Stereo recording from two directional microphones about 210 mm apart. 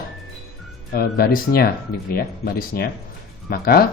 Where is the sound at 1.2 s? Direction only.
45° left (ahead or behind).